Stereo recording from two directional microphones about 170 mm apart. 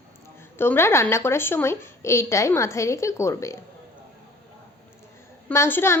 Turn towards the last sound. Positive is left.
turn(degrees=15)  # may be behind; listen again after turning